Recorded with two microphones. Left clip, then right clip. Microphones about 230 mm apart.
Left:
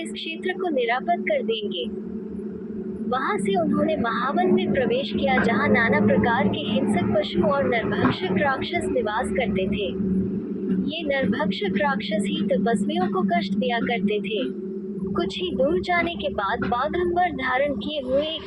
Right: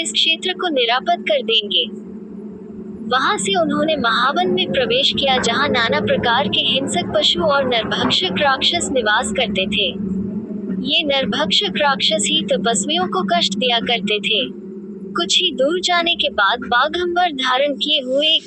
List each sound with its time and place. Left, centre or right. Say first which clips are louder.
0.3 s a woman's voice: right 8 dB; right
3.1 s a woman's voice: right 7 dB; right